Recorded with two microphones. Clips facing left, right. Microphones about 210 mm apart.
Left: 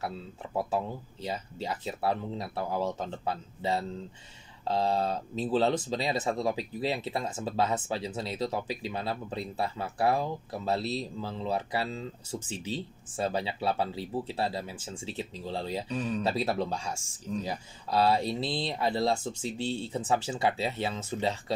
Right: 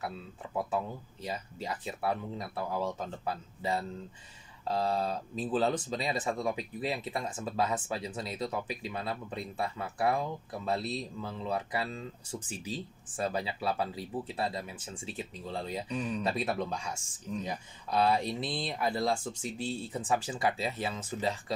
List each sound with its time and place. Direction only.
0.7 s speech: 30° left (ahead or behind)